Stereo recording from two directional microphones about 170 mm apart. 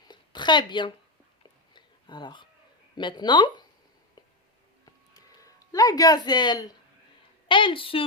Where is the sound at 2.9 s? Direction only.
25° left (ahead or behind).